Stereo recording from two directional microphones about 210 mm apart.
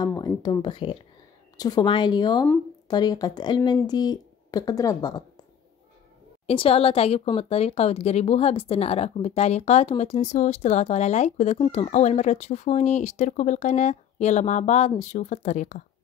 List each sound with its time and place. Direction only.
0.0 s speech: 15° left (ahead or behind)
6.4 s speech: 25° left (ahead or behind)